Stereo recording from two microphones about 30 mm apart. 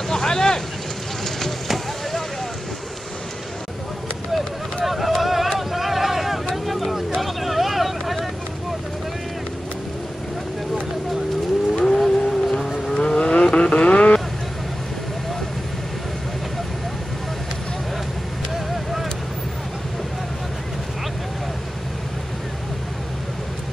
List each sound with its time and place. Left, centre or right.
0.1 s boat: centre
4.8 s a sound: centre
5.6 s boat: centre
6.5 s vehicle: centre
7.2 s a sound: centre
11.7 s vehicle: left
12.9 s vehicle: left